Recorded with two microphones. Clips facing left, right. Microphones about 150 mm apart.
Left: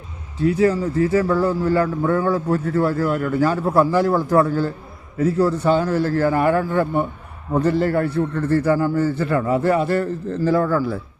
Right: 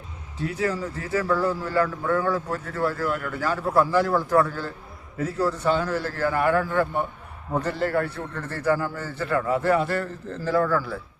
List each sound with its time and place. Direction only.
0.6 s a man's voice: 30° left (ahead or behind)